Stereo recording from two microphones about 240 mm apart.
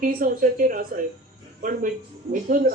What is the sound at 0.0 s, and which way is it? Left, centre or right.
Speech, right.